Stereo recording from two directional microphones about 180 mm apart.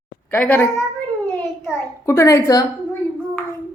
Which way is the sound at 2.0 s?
15° left (ahead or behind).